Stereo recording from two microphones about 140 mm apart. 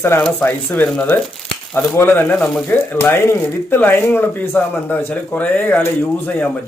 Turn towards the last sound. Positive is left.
turn(degrees=15)  # may be behind; listen again after turning